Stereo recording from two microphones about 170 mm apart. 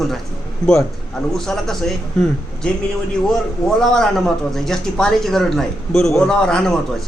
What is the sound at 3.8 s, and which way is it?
Speech, 5° left (ahead or behind).